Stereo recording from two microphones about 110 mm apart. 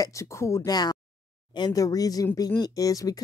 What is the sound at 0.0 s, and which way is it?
Speech, 30° left (ahead or behind).